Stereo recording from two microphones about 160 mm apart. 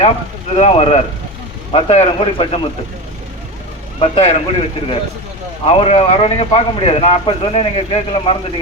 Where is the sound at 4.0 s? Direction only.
35° left (ahead or behind).